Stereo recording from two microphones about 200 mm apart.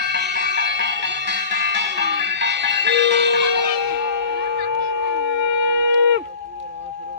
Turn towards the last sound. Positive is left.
turn(degrees=-65)  # may be behind; listen again after turning